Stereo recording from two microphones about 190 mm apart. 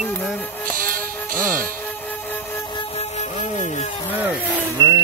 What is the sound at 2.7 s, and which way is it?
Music, 35° left (ahead or behind).